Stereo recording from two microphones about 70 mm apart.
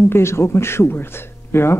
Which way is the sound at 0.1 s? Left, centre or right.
Left.